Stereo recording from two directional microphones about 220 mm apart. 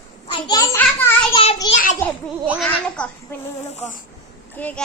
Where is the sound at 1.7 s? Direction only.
35° left (ahead or behind).